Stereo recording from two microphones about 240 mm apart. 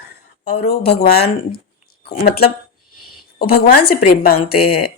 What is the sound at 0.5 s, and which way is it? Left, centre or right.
Speech, left.